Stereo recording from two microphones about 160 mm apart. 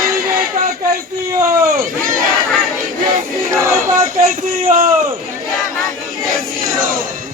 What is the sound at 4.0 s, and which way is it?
Speech, 60° right (ahead or behind).